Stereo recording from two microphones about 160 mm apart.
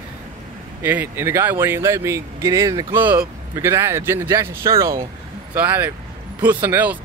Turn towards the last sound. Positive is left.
turn(degrees=-10)  # may be behind; listen again after turning